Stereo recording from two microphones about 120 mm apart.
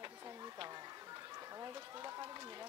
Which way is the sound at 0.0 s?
30° right (ahead or behind).